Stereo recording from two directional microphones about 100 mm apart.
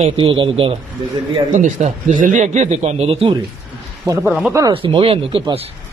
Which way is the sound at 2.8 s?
90° right.